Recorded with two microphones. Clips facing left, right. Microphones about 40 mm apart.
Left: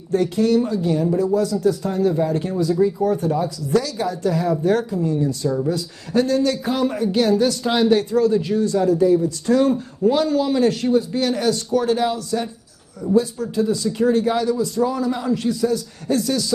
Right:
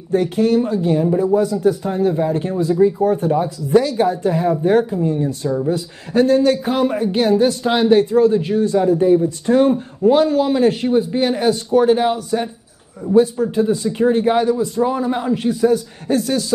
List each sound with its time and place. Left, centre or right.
0.1 s a man's voice: right